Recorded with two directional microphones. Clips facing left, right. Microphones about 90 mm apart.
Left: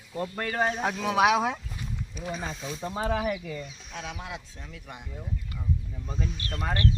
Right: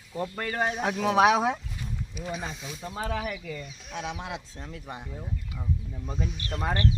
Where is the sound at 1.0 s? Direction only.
30° right (ahead or behind).